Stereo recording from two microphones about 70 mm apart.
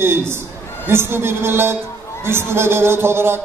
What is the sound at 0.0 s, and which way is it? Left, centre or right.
A man's voice, right.